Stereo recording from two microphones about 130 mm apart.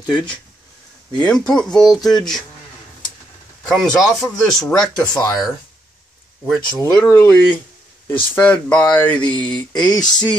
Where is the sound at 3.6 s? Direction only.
5° left (ahead or behind).